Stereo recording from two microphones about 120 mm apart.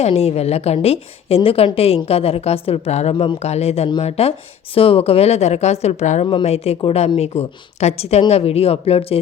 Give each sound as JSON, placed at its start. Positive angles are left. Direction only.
{"t": 0.0, "sound": "a woman's voice", "side_deg": 60}
{"t": 6.4, "sound": "a woman's voice", "side_deg": 60}